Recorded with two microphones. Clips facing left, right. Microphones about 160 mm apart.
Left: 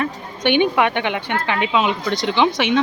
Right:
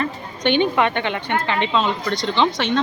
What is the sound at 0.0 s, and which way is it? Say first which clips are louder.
A woman's voice: left 1 dB; 15° left (ahead or behind).